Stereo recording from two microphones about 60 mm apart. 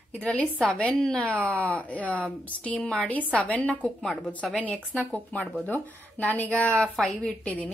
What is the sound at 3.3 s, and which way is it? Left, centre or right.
A woman's voice, left.